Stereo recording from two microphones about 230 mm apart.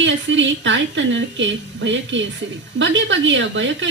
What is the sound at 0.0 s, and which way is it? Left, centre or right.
A woman's voice, right.